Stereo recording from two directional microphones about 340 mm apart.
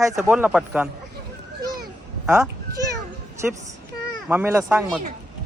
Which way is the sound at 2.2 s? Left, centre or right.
Centre.